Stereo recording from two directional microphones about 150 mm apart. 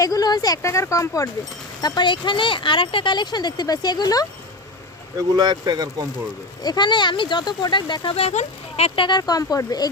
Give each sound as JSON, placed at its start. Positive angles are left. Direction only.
{"t": 0.0, "sound": "speech", "side_deg": 25}
{"t": 5.1, "sound": "speech", "side_deg": -25}
{"t": 6.6, "sound": "speech", "side_deg": 30}
{"t": 9.0, "sound": "speech", "side_deg": 25}